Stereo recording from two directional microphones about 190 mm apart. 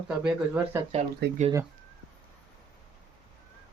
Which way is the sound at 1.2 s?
60° right (ahead or behind).